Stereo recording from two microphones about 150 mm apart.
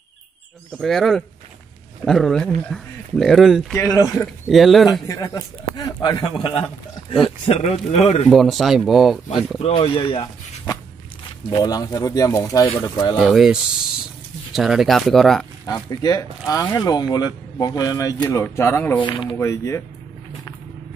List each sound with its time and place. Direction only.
0.7 s speech: centre (ahead or behind)
3.7 s speech: 20° left (ahead or behind)
4.5 s speech: centre (ahead or behind)
5.0 s speech: 20° left (ahead or behind)
7.2 s speech: 45° left (ahead or behind)
8.3 s speech: centre (ahead or behind)
9.6 s speech: 40° left (ahead or behind)
11.5 s speech: 25° left (ahead or behind)
13.1 s speech: centre (ahead or behind)
16.0 s speech: 25° left (ahead or behind)
18.9 s speech: 30° left (ahead or behind)
19.3 s speech: 20° left (ahead or behind)